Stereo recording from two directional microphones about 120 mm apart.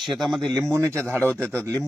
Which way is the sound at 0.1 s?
Centre (ahead or behind).